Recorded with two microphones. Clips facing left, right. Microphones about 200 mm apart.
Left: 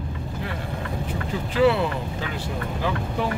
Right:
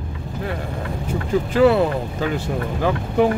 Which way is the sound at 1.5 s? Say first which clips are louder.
Right 4 dB; 45° right (ahead or behind).